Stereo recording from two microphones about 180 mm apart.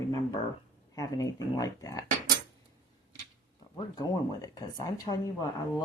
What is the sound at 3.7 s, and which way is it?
Speech, 20° left (ahead or behind).